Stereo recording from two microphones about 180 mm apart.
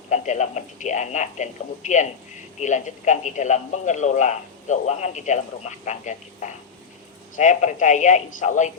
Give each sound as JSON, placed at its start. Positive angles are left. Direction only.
{"t": 0.1, "sound": "a man's voice", "side_deg": 40}